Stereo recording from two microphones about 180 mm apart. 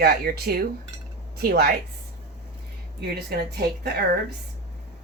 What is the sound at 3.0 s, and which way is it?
A woman's voice, 65° right (ahead or behind).